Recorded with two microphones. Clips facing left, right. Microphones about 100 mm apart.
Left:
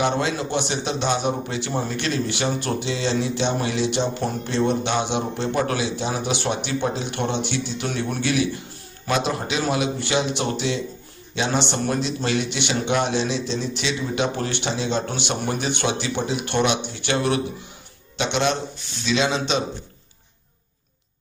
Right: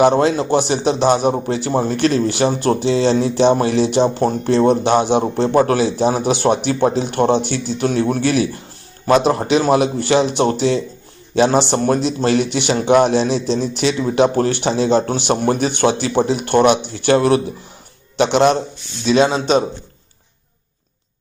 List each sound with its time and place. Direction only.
0.0 s a man's voice: 35° right (ahead or behind)